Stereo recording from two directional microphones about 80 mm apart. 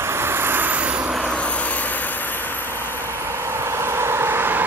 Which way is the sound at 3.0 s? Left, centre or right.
Right.